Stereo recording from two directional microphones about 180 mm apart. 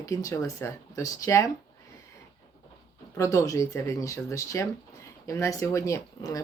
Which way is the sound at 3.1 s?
15° left (ahead or behind).